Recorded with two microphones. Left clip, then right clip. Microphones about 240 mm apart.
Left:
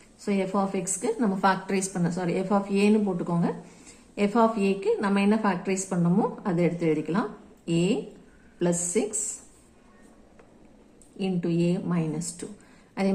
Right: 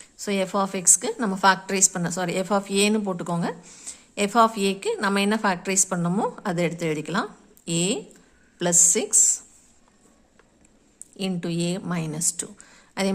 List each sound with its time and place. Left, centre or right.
0.3 s a woman's voice: right
11.2 s a woman's voice: right